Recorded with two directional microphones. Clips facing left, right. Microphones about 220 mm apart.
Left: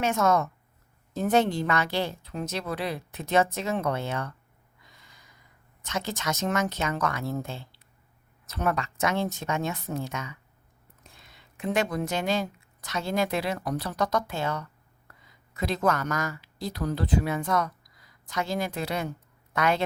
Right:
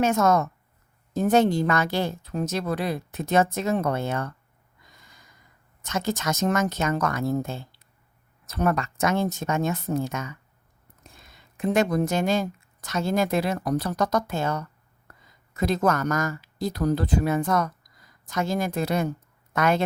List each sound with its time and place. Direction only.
0.0 s speech: 45° right (ahead or behind)
4.8 s a sound: 45° right (ahead or behind)
5.8 s speech: 45° right (ahead or behind)